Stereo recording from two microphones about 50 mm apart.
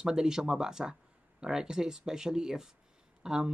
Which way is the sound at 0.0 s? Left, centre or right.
Centre.